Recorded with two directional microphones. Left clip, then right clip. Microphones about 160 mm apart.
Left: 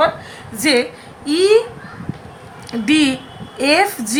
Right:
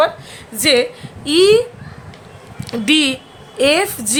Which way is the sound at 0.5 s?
45° right (ahead or behind).